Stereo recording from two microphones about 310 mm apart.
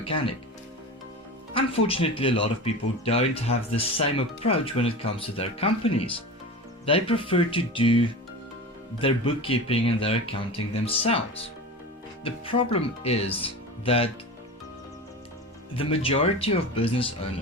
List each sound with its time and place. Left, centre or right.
1.5 s speech: centre
12.2 s speech: centre
15.7 s speech: centre